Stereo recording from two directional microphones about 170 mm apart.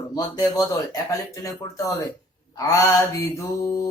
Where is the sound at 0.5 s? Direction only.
20° left (ahead or behind).